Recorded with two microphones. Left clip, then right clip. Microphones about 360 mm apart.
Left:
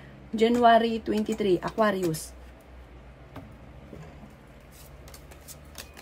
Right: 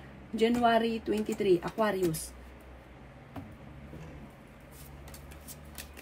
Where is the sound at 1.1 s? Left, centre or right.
Left.